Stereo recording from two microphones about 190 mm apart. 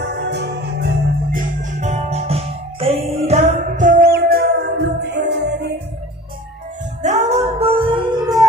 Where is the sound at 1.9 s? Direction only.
30° right (ahead or behind); by 5.5 s 60° right (ahead or behind).